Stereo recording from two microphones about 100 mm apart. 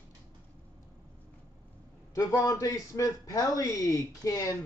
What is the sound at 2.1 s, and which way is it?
A man's voice, 35° left (ahead or behind).